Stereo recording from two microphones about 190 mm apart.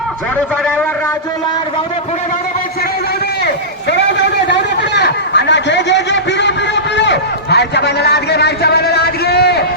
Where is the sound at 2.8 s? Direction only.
55° left (ahead or behind).